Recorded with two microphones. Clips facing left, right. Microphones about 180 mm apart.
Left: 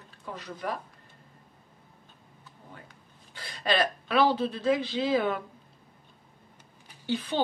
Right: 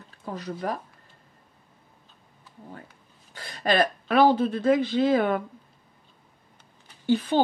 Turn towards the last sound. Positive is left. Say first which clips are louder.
# right 7 dB
turn(degrees=-45)  # may be behind; listen again after turning